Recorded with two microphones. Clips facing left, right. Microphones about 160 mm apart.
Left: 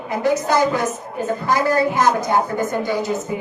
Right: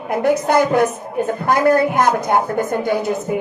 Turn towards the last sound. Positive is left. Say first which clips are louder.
# right 3 dB
turn(degrees=-55)  # may be behind; listen again after turning